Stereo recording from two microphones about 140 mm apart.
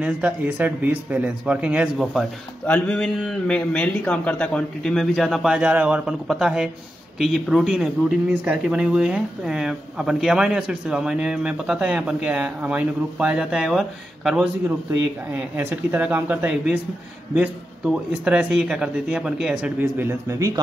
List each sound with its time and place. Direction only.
0.0 s speech: 10° right (ahead or behind)
2.6 s music: 10° left (ahead or behind)
3.2 s speech: 5° left (ahead or behind)
14.9 s speech: 15° right (ahead or behind)
17.8 s speech: 5° right (ahead or behind); by 20.6 s 25° right (ahead or behind)